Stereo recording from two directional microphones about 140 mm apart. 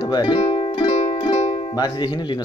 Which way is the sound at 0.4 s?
45° left (ahead or behind).